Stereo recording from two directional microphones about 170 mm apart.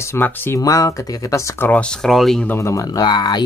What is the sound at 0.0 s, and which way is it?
A man's voice, 15° left (ahead or behind).